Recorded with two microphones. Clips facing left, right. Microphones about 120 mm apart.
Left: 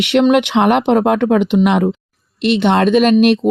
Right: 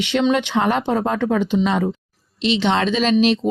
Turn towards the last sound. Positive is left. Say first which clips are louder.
# left 5 dB
turn(degrees=55)  # may be behind; listen again after turning